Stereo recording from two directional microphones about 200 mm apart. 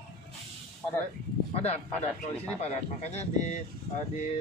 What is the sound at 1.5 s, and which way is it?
Speech, 30° left (ahead or behind).